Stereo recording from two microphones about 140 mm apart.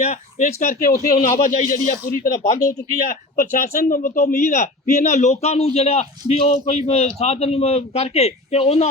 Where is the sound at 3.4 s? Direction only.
80° left.